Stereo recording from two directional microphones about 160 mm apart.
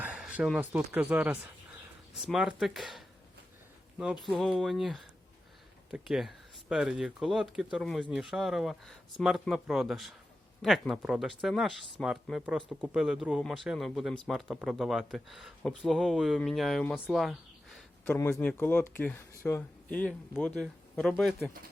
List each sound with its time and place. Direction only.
0.0 s speech: 5° right (ahead or behind)
18.0 s speech: 15° left (ahead or behind)